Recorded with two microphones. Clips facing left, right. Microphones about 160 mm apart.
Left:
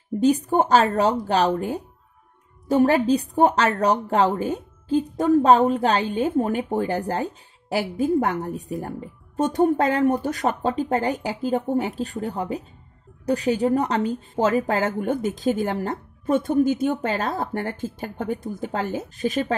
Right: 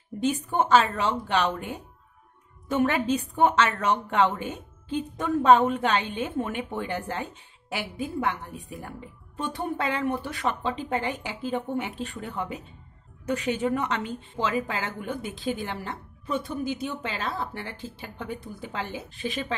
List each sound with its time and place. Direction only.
0.2 s a woman's voice: 40° left (ahead or behind)